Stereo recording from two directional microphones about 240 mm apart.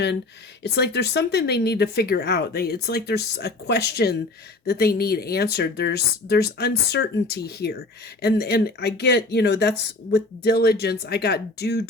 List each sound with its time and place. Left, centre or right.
0.6 s speech: left